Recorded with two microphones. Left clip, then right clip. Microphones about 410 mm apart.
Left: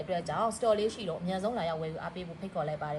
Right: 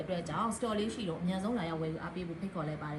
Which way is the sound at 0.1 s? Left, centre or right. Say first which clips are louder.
Left 5 dB; centre.